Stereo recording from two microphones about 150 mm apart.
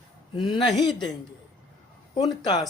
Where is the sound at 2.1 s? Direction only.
30° left (ahead or behind).